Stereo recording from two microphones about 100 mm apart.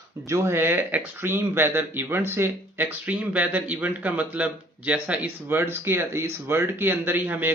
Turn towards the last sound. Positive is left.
turn(degrees=-20)  # may be behind; listen again after turning